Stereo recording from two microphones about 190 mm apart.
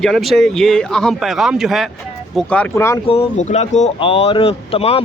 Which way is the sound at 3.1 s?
35° left (ahead or behind).